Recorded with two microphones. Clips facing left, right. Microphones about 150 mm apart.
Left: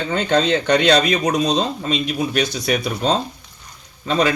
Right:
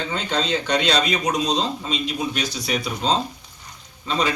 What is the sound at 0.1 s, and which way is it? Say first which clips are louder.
A man's voice: left 9 dB; 55° left (ahead or behind).